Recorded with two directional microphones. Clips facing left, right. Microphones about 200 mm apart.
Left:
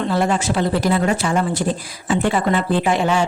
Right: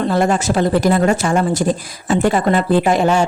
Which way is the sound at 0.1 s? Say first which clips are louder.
Right 3 dB; 45° right (ahead or behind).